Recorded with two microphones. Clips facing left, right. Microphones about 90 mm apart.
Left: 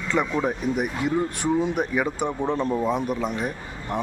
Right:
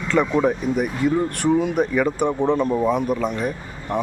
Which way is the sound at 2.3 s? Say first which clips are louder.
Right 5 dB; 15° right (ahead or behind).